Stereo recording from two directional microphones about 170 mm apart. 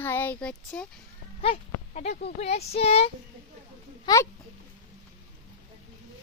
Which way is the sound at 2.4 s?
40° left (ahead or behind).